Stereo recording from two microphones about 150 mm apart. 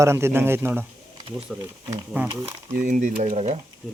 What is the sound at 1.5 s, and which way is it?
Speech, 5° right (ahead or behind).